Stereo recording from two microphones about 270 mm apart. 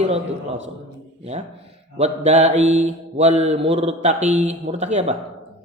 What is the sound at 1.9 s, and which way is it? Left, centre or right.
Speech, right.